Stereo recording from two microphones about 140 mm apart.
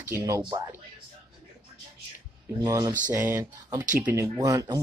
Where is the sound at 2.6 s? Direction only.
30° right (ahead or behind).